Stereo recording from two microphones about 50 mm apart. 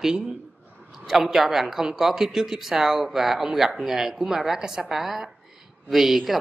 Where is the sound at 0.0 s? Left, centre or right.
Centre.